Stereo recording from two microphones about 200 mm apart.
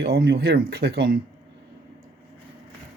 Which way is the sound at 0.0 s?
55° right (ahead or behind).